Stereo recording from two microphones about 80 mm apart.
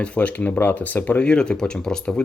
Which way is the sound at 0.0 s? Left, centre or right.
Centre.